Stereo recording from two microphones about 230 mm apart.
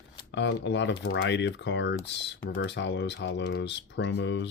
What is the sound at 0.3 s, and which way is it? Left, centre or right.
Speech, left.